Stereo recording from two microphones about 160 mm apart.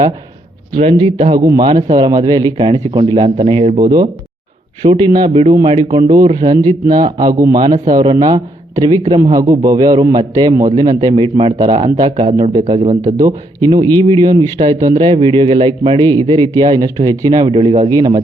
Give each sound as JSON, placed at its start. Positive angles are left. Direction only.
{"t": 0.8, "sound": "a man's voice", "side_deg": -40}
{"t": 3.2, "sound": "a man's voice", "side_deg": -40}
{"t": 3.8, "sound": "a man's voice", "side_deg": -30}
{"t": 12.1, "sound": "a man's voice", "side_deg": -45}
{"t": 13.1, "sound": "a man's voice", "side_deg": -25}